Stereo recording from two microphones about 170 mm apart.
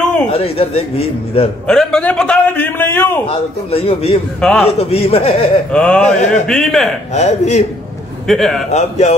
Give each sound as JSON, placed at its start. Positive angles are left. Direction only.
{"t": 0.3, "sound": "a man's voice", "side_deg": 35}
{"t": 1.7, "sound": "a man's voice", "side_deg": 5}
{"t": 3.3, "sound": "a man's voice", "side_deg": 35}
{"t": 4.4, "sound": "speech", "side_deg": 5}
{"t": 4.6, "sound": "a man's voice", "side_deg": 35}
{"t": 5.7, "sound": "a man's voice", "side_deg": 5}
{"t": 7.2, "sound": "a man's voice", "side_deg": 40}
{"t": 8.3, "sound": "speech", "side_deg": 0}
{"t": 8.6, "sound": "a man's voice", "side_deg": 40}